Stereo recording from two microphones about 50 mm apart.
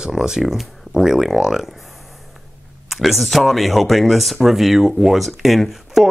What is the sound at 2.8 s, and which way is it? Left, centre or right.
Speech, centre.